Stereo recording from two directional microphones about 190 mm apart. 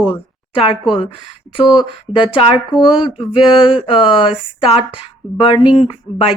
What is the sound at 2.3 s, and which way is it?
A woman's voice, 30° left (ahead or behind).